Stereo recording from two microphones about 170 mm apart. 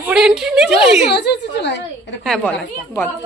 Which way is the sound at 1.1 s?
80° left.